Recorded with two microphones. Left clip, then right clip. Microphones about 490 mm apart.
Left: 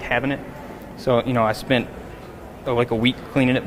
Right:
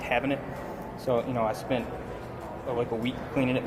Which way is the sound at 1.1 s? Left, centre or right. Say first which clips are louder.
Left 8 dB; left.